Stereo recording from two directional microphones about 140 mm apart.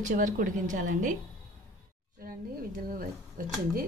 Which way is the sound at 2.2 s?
90° right.